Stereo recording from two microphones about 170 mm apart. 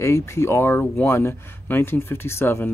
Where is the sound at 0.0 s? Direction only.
15° left (ahead or behind).